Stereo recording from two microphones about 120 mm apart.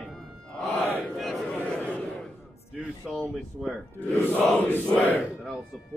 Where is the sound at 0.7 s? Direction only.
20° left (ahead or behind).